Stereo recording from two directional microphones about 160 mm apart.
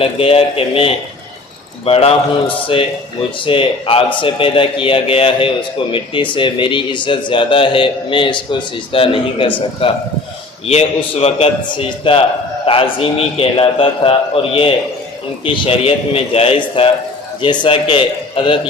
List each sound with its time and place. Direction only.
0.0 s speech: 35° left (ahead or behind)